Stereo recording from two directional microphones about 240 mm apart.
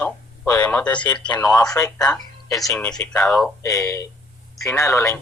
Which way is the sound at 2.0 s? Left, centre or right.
Centre.